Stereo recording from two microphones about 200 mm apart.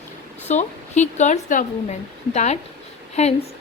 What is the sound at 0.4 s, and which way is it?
A woman's voice, 35° left (ahead or behind).